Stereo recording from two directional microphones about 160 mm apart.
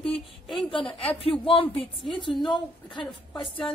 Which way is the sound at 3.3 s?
30° left (ahead or behind).